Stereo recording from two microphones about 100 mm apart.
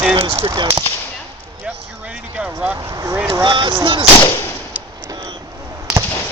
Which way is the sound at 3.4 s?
55° right (ahead or behind).